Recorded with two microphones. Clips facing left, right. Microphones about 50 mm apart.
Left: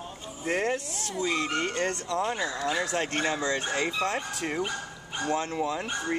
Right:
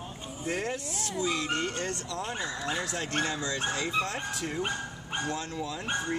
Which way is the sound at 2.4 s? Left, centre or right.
Centre.